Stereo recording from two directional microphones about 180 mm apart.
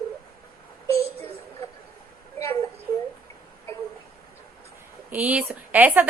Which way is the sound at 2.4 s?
15° left (ahead or behind).